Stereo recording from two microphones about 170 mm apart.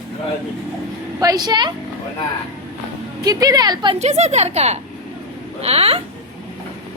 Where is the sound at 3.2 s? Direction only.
20° right (ahead or behind).